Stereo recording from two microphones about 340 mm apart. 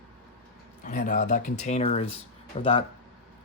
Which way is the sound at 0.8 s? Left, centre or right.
Left.